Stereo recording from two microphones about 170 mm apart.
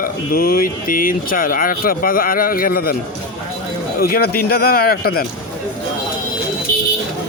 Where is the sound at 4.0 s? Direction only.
60° left (ahead or behind).